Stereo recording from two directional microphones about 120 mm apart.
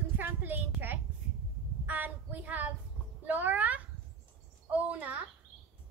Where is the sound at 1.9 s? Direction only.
15° right (ahead or behind).